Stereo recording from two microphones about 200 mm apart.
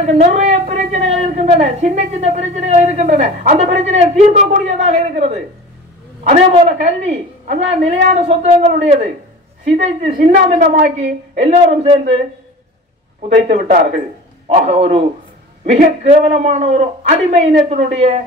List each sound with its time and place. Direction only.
0.0 s a woman's voice: 35° right (ahead or behind)
10.3 s a woman's voice: 35° right (ahead or behind)
13.3 s a woman's voice: 40° right (ahead or behind)